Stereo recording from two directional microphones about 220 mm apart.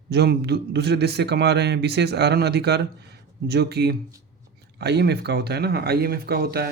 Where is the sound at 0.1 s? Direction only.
50° right (ahead or behind).